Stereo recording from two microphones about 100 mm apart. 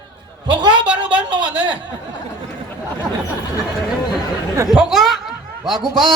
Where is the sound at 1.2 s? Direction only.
55° right (ahead or behind).